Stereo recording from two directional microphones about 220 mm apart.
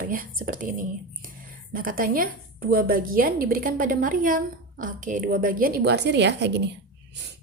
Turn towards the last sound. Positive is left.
turn(degrees=-50)  # may be behind; listen again after turning